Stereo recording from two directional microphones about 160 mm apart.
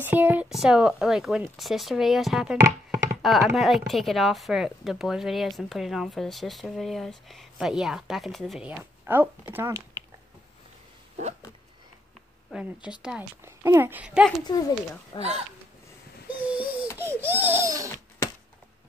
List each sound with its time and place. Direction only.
0.0 s speech: 10° right (ahead or behind)
2.6 s music: 20° right (ahead or behind)
3.2 s speech: centre (ahead or behind); by 10.0 s 20° right (ahead or behind)
12.4 s speech: 5° right (ahead or behind)
15.1 s speech: 40° right (ahead or behind)
16.4 s a sound: 10° right (ahead or behind)
17.0 s speech: 15° right (ahead or behind)